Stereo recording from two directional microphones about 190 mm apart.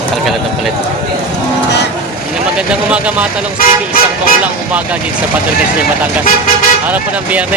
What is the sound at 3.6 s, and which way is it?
Speech, 50° left (ahead or behind).